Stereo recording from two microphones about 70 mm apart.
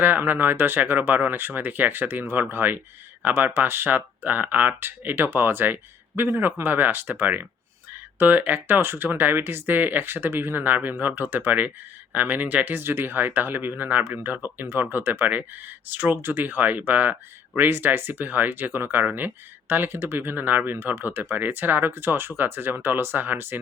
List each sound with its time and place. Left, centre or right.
0.0 s speech: right